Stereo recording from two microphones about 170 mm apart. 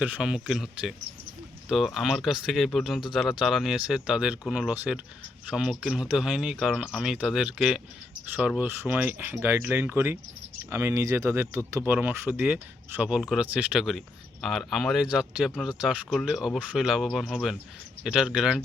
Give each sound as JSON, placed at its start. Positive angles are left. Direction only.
{"t": 0.0, "sound": "speech", "side_deg": -5}